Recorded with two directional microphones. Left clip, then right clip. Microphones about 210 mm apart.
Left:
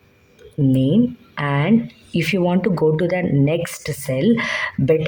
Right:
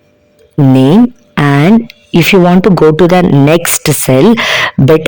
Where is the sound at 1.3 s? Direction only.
55° right (ahead or behind).